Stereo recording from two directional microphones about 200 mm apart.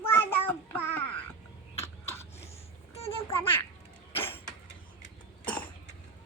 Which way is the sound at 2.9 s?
30° left (ahead or behind).